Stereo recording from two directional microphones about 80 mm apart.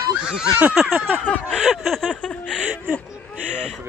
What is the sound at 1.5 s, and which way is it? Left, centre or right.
Snicker, centre.